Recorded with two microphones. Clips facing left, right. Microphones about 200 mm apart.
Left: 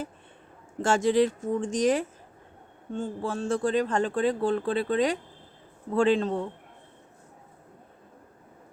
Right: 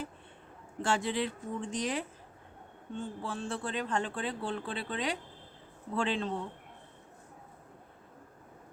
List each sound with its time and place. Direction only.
0.8 s speech: 45° left (ahead or behind)